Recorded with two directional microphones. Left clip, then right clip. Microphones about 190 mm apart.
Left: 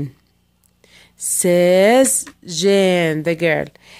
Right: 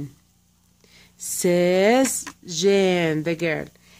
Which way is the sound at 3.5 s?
40° left (ahead or behind).